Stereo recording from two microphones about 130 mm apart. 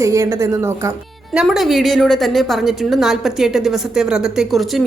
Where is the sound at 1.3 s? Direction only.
5° right (ahead or behind).